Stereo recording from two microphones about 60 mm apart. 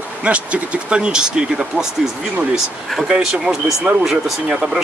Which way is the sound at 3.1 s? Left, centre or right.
Centre.